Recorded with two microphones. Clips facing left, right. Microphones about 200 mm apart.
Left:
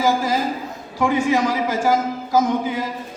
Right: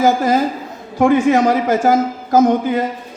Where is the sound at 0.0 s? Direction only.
50° right (ahead or behind).